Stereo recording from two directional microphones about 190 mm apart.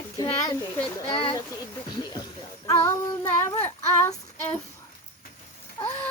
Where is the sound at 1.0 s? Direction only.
25° left (ahead or behind).